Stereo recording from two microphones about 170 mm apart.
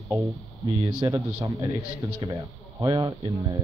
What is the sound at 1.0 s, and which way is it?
Speech, 20° right (ahead or behind).